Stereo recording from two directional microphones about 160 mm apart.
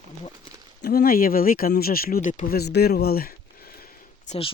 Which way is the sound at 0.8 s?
65° left (ahead or behind).